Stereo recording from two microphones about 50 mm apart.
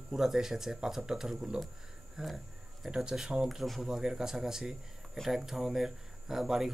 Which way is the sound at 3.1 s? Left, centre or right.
Centre.